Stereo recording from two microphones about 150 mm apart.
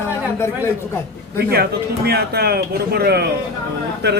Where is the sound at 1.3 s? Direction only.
90° right.